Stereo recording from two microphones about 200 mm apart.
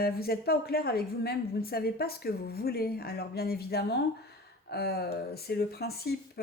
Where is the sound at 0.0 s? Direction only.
50° left (ahead or behind).